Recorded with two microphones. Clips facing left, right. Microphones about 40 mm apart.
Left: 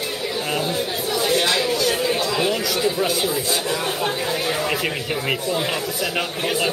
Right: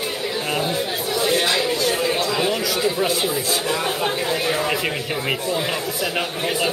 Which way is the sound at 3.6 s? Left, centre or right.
Centre.